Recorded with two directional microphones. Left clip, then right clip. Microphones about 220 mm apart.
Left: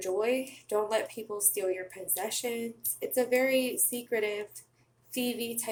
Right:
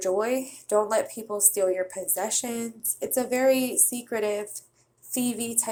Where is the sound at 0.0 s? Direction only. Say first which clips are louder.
Right 4 dB; 15° right (ahead or behind).